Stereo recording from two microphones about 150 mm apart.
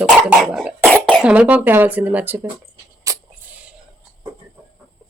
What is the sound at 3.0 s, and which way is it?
Music, 20° right (ahead or behind).